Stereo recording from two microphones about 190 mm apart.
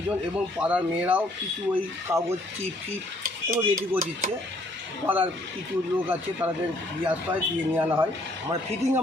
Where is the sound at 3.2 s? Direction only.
50° right (ahead or behind).